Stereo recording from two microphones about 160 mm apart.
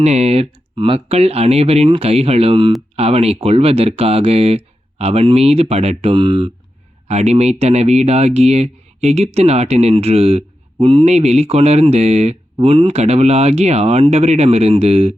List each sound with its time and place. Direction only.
0.0 s speech: 45° right (ahead or behind)
7.1 s speech: 45° right (ahead or behind)